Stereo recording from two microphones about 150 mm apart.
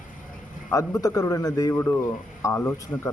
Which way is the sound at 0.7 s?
20° left (ahead or behind).